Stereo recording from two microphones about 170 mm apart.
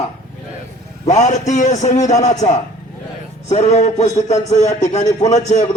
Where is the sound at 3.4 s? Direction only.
40° left (ahead or behind).